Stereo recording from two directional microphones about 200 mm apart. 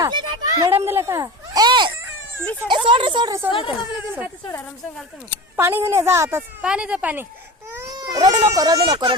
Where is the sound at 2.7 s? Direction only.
25° right (ahead or behind).